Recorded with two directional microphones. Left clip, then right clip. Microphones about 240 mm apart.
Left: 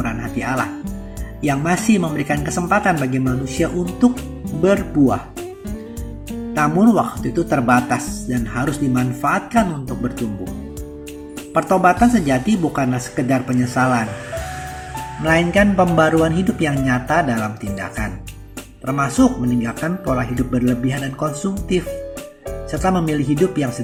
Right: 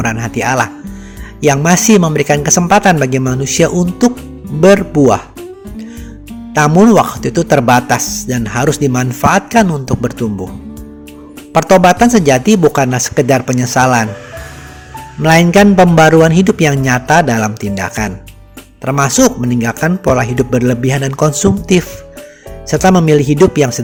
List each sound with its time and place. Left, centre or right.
0.0 s speech: right
6.5 s speech: right
11.5 s speech: right
15.2 s speech: right